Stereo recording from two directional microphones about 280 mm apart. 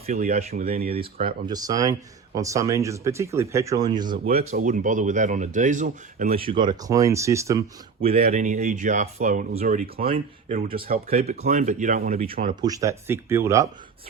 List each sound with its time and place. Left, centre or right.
0.0 s speech: right
1.5 s speech: centre
4.3 s speech: right
6.4 s speech: centre
8.0 s speech: right
12.6 s speech: centre